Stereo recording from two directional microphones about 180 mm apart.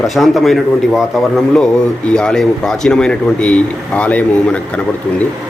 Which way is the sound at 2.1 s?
5° left (ahead or behind).